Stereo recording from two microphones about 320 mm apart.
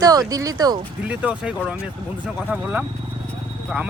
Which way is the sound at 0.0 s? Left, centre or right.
Centre.